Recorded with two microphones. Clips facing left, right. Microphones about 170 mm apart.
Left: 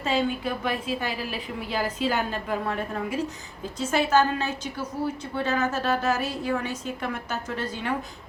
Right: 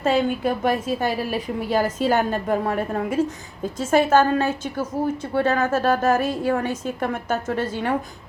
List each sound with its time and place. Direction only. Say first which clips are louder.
0.0 s a woman's voice: right 5 dB; 50° right (ahead or behind)